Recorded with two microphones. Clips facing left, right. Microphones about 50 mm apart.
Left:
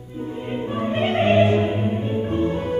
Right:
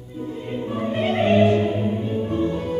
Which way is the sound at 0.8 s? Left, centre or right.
Left.